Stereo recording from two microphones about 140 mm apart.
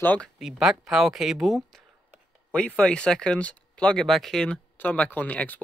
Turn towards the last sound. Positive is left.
turn(degrees=10)  # may be behind; listen again after turning